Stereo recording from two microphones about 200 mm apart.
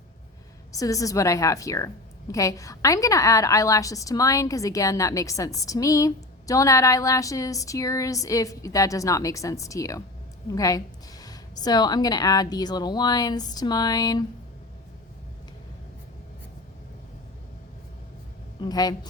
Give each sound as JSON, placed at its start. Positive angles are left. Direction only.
{"t": 0.7, "sound": "a woman's voice", "side_deg": 15}
{"t": 18.6, "sound": "a woman's voice", "side_deg": 20}